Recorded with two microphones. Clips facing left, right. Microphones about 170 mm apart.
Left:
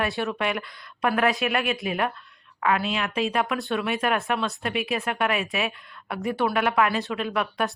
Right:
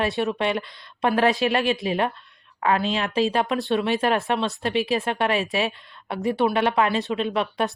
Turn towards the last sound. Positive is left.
turn(degrees=-25)  # may be behind; listen again after turning